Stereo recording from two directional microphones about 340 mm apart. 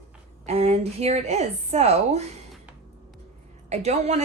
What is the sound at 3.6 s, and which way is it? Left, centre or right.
Speech, centre.